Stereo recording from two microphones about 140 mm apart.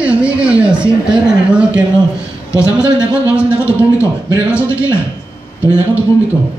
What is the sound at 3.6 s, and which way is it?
A man's voice, 20° left (ahead or behind).